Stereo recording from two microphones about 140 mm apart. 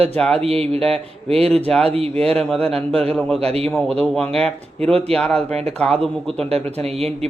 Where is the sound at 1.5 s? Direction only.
5° left (ahead or behind).